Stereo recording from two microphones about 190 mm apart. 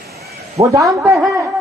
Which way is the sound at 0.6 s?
40° right (ahead or behind).